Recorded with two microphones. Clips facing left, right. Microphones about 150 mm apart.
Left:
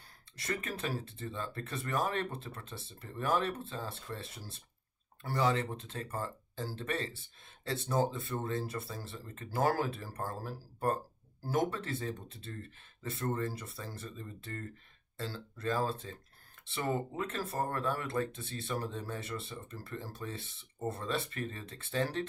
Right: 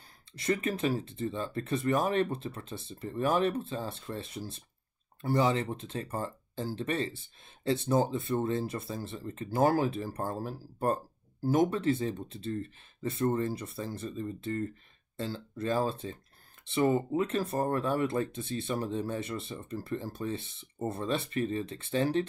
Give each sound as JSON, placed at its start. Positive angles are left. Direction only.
{"t": 0.5, "sound": "speech", "side_deg": -20}